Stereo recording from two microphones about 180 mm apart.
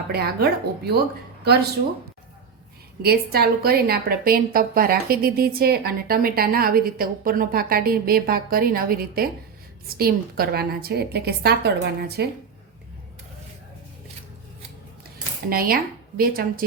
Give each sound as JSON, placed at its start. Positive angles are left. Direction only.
{"t": 0.1, "sound": "a woman's voice", "side_deg": -60}
{"t": 3.0, "sound": "a woman's voice", "side_deg": -60}
{"t": 15.4, "sound": "a woman's voice", "side_deg": -55}